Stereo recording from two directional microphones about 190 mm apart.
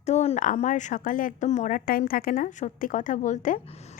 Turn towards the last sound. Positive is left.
turn(degrees=35)  # may be behind; listen again after turning